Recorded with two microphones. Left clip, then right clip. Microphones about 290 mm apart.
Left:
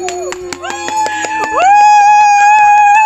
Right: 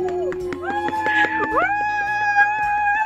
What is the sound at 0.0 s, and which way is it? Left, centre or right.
Music, left.